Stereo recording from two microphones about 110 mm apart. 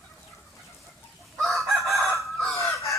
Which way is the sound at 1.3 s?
Centre (ahead or behind).